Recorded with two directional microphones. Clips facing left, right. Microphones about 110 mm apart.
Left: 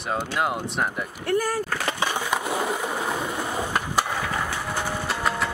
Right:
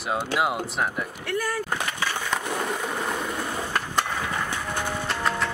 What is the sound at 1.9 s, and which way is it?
Skateboard, 20° left (ahead or behind).